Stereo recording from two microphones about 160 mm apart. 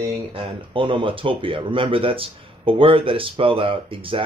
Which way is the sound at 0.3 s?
35° right (ahead or behind).